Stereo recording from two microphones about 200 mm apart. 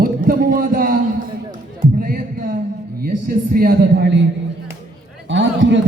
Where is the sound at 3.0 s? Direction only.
45° right (ahead or behind).